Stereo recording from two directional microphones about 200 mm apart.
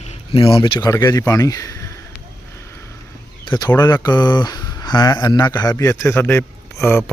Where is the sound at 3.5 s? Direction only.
15° left (ahead or behind).